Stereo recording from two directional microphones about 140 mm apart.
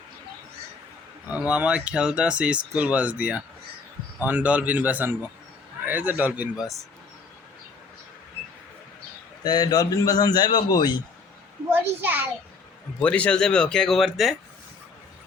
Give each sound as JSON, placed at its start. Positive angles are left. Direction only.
{"t": 1.3, "sound": "speech", "side_deg": -10}
{"t": 9.4, "sound": "a man's voice", "side_deg": 30}
{"t": 11.7, "sound": "a child's voice", "side_deg": -15}
{"t": 13.0, "sound": "speech", "side_deg": 10}